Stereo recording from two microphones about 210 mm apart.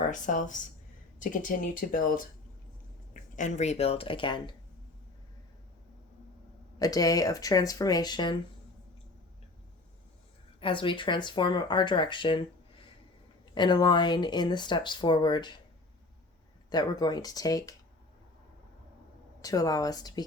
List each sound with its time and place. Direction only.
0.0 s speech: 35° left (ahead or behind)
6.7 s speech: 15° left (ahead or behind)
10.6 s speech: 25° left (ahead or behind)
16.6 s speech: 20° left (ahead or behind)
19.4 s speech: 15° left (ahead or behind)